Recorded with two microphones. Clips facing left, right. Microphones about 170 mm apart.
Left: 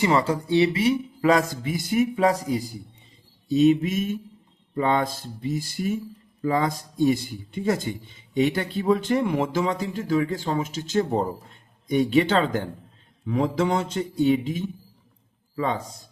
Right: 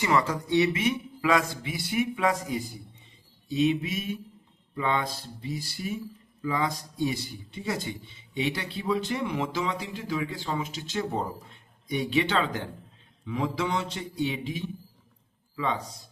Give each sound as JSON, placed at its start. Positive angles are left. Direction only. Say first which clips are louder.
{"t": 0.0, "sound": "a man's voice", "louder": "left 4 dB", "side_deg": 30}